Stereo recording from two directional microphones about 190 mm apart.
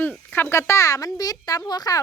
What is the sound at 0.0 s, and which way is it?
Speech, 5° left (ahead or behind).